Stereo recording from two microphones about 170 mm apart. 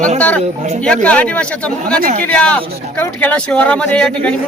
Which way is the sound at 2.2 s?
5° left (ahead or behind).